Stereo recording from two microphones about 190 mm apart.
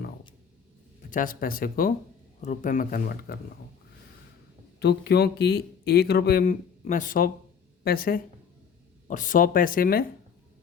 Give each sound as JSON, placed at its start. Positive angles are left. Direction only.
{"t": 1.1, "sound": "speech", "side_deg": 45}
{"t": 4.8, "sound": "speech", "side_deg": 60}